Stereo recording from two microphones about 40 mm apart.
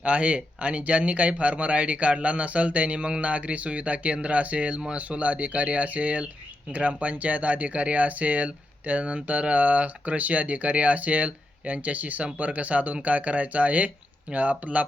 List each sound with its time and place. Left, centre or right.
0.0 s speech: right